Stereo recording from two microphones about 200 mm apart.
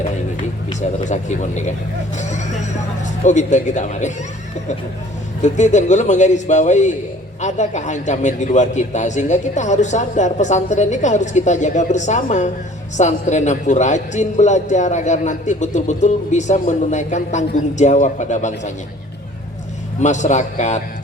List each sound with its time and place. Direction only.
0.8 s a man's voice: 35° left (ahead or behind)
5.4 s a man's voice: 35° left (ahead or behind)
20.0 s a man's voice: 35° left (ahead or behind)